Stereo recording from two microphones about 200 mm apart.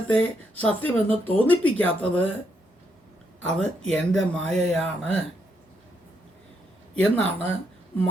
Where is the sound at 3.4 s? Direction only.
5° left (ahead or behind).